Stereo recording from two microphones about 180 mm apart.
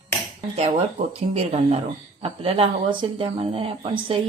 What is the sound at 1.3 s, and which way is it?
Speech, 35° right (ahead or behind).